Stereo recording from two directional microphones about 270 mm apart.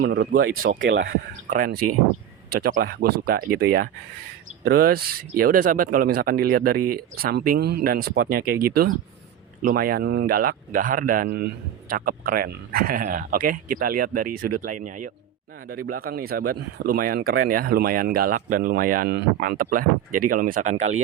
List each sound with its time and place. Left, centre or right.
0.0 s speech: right
9.6 s speech: right